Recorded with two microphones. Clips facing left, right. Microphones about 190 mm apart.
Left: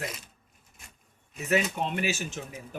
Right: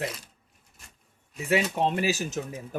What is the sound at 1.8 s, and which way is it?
Speech, 35° right (ahead or behind).